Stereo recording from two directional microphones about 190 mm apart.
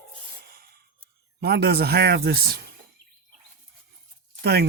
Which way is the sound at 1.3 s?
60° right (ahead or behind).